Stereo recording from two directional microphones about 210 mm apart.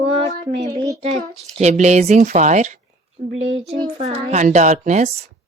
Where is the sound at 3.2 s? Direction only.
60° right (ahead or behind).